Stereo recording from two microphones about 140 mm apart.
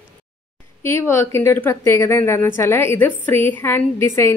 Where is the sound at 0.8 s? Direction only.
20° left (ahead or behind).